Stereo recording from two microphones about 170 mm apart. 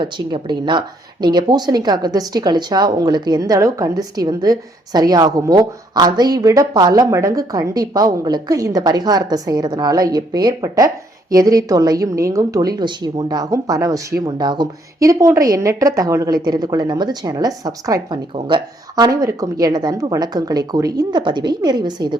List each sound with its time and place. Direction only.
0.0 s speech: 30° right (ahead or behind)